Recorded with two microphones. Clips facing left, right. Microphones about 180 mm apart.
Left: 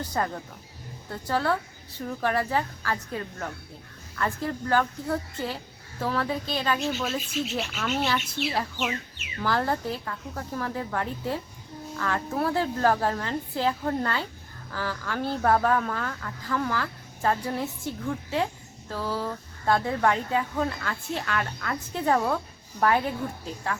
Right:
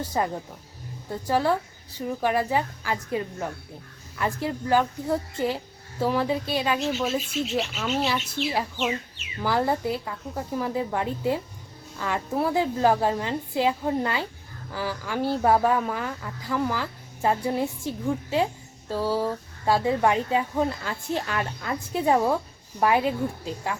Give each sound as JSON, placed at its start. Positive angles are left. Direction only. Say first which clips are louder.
{"t": 0.0, "sound": "speech", "louder": "right 2 dB", "side_deg": -10}